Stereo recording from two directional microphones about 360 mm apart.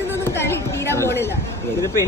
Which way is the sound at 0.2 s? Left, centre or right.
Centre.